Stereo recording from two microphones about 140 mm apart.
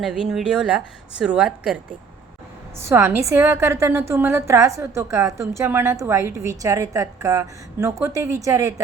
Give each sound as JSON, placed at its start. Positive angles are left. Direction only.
{"t": 0.0, "sound": "a woman's voice", "side_deg": -5}